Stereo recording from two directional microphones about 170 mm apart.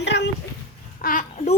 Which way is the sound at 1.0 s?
55° left (ahead or behind).